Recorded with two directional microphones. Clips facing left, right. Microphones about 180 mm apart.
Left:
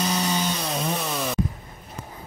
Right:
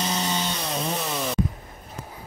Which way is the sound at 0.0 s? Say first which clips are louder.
Left 2 dB; 25° right (ahead or behind).